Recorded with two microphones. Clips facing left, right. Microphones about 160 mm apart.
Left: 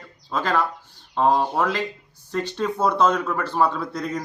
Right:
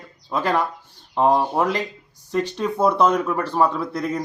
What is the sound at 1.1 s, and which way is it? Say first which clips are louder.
Speech: right 2 dB; 15° right (ahead or behind).